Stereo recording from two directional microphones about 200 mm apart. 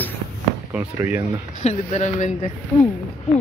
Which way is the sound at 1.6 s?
35° left (ahead or behind).